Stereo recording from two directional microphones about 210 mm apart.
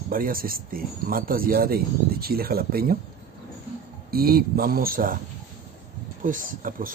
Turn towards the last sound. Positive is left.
turn(degrees=-40)  # may be behind; listen again after turning